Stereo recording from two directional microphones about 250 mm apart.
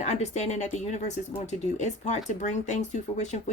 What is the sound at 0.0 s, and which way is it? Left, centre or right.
Speech, left.